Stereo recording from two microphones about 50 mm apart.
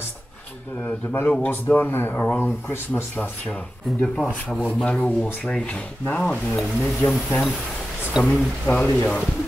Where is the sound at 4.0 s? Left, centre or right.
Left.